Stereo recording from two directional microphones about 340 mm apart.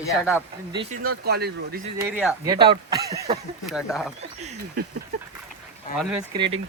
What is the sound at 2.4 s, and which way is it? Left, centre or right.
Speech, centre.